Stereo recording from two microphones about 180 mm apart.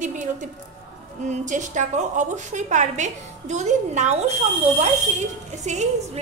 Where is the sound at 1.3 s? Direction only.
45° right (ahead or behind).